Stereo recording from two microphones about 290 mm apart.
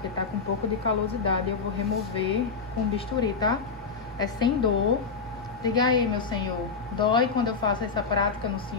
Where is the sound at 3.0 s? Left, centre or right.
Centre.